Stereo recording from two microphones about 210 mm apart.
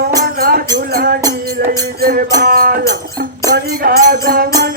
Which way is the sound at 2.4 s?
45° right (ahead or behind).